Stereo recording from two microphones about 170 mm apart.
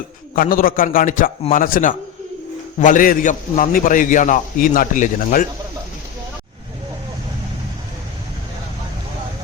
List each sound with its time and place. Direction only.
0.3 s a man's voice: 55° left (ahead or behind)